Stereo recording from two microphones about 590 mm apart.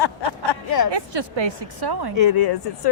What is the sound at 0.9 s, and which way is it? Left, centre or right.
A woman's voice, right.